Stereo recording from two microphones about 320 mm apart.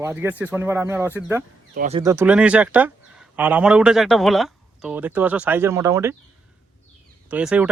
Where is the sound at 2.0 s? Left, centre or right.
Centre.